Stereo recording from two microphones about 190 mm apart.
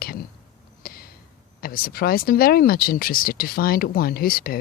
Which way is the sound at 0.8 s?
50° left (ahead or behind).